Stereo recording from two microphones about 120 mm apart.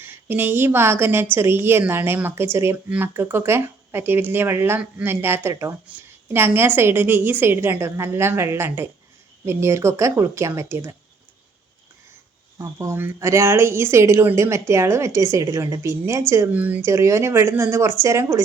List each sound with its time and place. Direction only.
0.0 s a woman's voice: 20° right (ahead or behind)
12.5 s a woman's voice: 25° right (ahead or behind)